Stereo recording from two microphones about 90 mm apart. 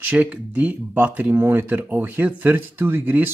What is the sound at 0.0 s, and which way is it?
Speech, 15° right (ahead or behind).